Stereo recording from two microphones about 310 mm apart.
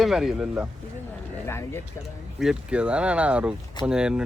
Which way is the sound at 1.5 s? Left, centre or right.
Centre.